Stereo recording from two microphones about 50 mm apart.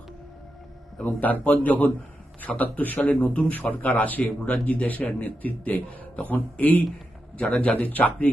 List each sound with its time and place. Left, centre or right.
1.2 s a man's voice: left
3.5 s a man's voice: left
4.2 s a man's voice: centre; by 6.8 s left
7.3 s a man's voice: left